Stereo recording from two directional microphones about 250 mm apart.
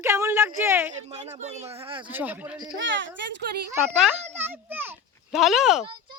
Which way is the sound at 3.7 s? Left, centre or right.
Centre.